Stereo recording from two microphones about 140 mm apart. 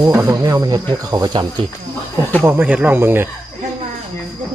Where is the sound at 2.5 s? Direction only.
10° right (ahead or behind).